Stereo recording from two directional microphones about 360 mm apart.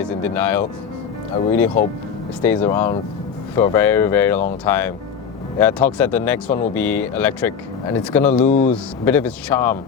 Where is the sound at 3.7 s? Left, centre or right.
Centre.